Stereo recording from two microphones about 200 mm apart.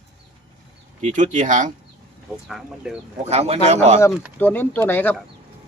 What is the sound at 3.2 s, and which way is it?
Speech, 30° right (ahead or behind).